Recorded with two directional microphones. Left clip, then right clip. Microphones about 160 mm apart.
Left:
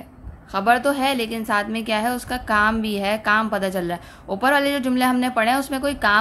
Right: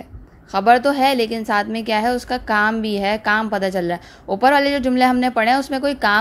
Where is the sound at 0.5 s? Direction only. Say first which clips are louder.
Right 4 dB; 35° right (ahead or behind).